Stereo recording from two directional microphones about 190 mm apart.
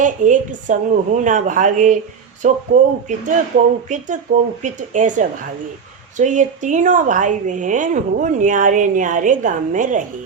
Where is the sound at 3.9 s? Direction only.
40° right (ahead or behind).